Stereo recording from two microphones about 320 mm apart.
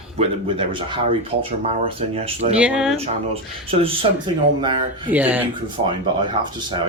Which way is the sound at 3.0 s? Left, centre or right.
Centre.